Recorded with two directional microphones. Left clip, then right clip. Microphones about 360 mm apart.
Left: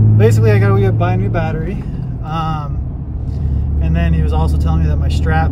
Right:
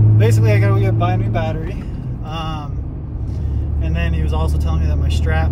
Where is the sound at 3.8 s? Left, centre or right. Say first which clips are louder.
Left 4 dB; centre.